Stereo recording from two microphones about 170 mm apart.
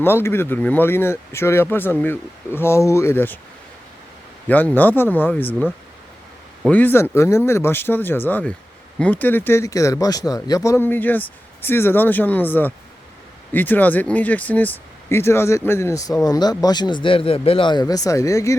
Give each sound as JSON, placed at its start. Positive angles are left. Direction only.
{"t": 0.0, "sound": "speech", "side_deg": 15}
{"t": 4.4, "sound": "speech", "side_deg": 10}
{"t": 6.7, "sound": "speech", "side_deg": 10}